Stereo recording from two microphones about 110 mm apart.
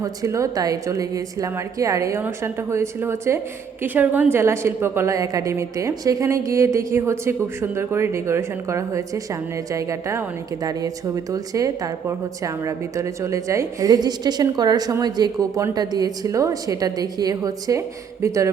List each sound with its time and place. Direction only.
0.0 s a woman's voice: 30° right (ahead or behind)